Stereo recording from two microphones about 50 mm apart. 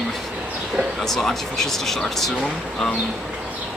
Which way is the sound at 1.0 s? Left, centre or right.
Centre.